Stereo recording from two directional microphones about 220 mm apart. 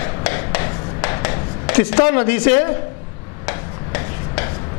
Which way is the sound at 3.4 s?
15° left (ahead or behind).